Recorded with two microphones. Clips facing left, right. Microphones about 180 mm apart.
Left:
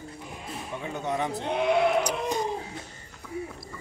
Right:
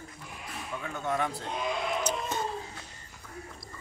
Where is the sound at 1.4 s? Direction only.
65° left (ahead or behind).